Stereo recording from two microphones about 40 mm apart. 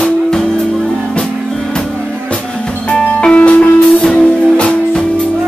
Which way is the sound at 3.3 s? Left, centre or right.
Left.